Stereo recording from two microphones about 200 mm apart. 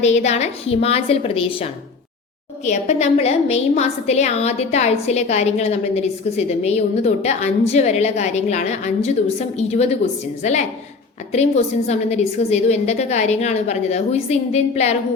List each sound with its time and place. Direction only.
0.0 s a woman's voice: 35° left (ahead or behind)
2.6 s a woman's voice: 35° left (ahead or behind)